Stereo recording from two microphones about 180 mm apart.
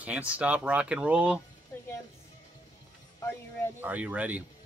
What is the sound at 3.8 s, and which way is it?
Speech, 10° right (ahead or behind).